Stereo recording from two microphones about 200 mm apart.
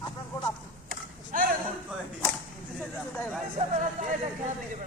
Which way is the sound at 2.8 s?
10° left (ahead or behind).